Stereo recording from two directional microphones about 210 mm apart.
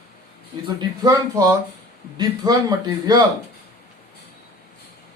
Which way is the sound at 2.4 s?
20° right (ahead or behind).